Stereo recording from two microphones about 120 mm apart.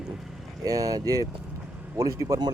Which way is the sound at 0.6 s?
30° right (ahead or behind).